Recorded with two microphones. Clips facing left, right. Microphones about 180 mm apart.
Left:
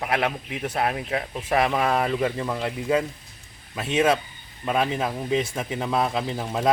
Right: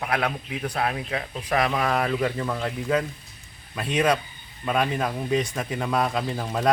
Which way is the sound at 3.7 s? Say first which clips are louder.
Left 1 dB; 25° left (ahead or behind).